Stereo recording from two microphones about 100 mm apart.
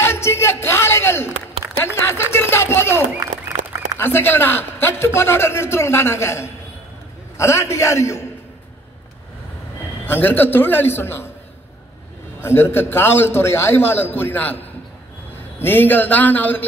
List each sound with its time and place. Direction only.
0.0 s a sound: 25° left (ahead or behind)
4.0 s a man's voice: 20° left (ahead or behind)
10.0 s a man's voice: 20° left (ahead or behind)
12.4 s a man's voice: 25° left (ahead or behind)
15.6 s a man's voice: 20° left (ahead or behind)